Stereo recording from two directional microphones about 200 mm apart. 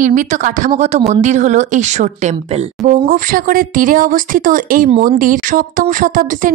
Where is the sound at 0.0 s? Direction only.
40° right (ahead or behind).